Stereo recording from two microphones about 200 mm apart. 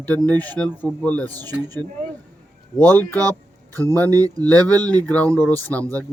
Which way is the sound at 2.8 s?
10° left (ahead or behind).